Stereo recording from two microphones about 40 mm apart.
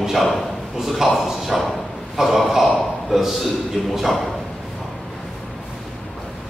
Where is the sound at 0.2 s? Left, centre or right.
Centre.